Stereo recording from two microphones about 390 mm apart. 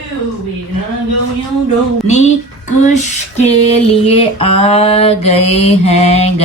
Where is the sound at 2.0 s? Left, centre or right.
Centre.